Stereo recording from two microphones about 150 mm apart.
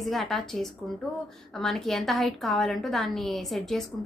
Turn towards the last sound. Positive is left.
turn(degrees=0)  # may be behind; listen again after turning